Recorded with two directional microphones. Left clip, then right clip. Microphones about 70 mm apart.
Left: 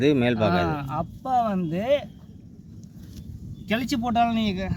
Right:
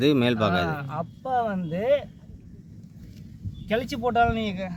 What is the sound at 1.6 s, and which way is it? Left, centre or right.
Speech, right.